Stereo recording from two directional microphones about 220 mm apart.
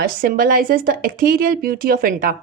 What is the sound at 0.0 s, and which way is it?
Speech, 40° right (ahead or behind).